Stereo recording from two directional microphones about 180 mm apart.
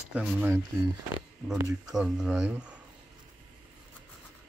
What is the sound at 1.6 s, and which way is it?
Mantra, 20° right (ahead or behind).